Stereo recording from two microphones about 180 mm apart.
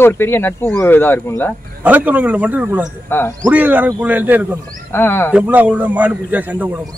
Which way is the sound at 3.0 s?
10° left (ahead or behind).